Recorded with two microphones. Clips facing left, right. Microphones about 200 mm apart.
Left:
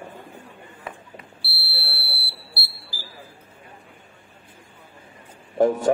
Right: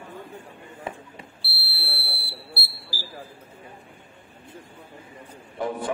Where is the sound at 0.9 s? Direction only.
30° right (ahead or behind).